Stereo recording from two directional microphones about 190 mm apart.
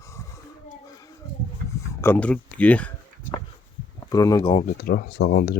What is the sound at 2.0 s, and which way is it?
Speech, 10° left (ahead or behind).